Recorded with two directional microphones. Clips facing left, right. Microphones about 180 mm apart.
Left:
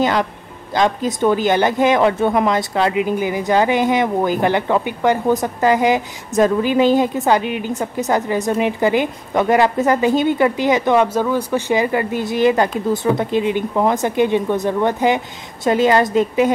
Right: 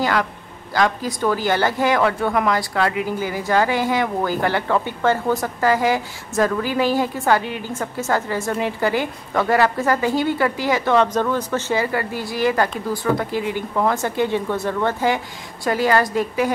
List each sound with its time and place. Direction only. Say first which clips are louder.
0.0 s a woman's voice: left 3 dB; 20° left (ahead or behind)